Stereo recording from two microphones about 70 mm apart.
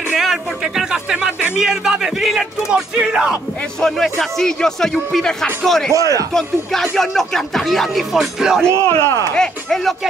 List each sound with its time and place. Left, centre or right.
0.1 s a sound: centre
1.6 s a man's voice: centre
3.8 s speech: centre
5.9 s a man's voice: right
6.3 s music: centre
8.7 s speech: left
9.3 s speech: centre